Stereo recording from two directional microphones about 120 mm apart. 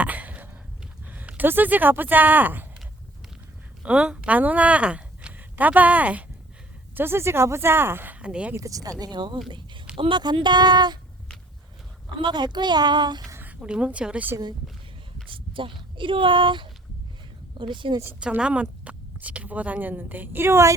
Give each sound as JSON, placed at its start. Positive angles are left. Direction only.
{"t": 0.0, "sound": "a sound", "side_deg": -15}
{"t": 1.1, "sound": "speech", "side_deg": -15}
{"t": 3.8, "sound": "speech", "side_deg": -10}
{"t": 8.5, "sound": "a woman's voice", "side_deg": -30}
{"t": 9.5, "sound": "a sound", "side_deg": -40}
{"t": 10.0, "sound": "a woman's voice", "side_deg": -40}
{"t": 12.1, "sound": "a woman's voice", "side_deg": -40}
{"t": 13.3, "sound": "a woman's voice", "side_deg": -15}
{"t": 15.3, "sound": "speech", "side_deg": -45}
{"t": 18.2, "sound": "a woman's voice", "side_deg": -10}